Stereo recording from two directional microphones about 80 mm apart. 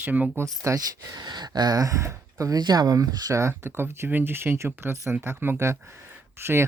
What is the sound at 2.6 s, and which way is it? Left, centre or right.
Speech, right.